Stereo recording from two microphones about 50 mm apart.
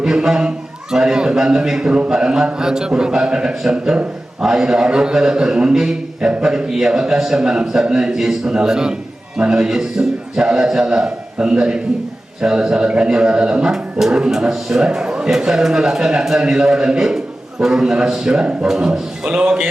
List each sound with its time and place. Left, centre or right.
0.0 s a man's voice: centre